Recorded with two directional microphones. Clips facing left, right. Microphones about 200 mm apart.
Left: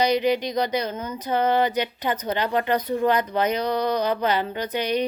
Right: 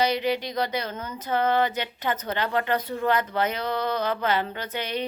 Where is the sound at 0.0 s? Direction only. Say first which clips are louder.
Left 4 dB; 15° left (ahead or behind).